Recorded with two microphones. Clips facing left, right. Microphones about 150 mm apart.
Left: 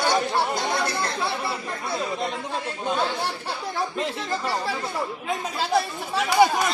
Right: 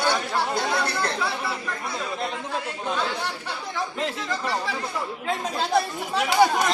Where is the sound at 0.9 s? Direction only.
25° left (ahead or behind).